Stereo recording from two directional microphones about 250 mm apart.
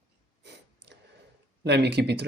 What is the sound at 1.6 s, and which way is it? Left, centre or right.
Speech, right.